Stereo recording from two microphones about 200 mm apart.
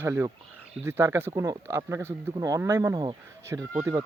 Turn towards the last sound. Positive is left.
turn(degrees=-15)  # may be behind; listen again after turning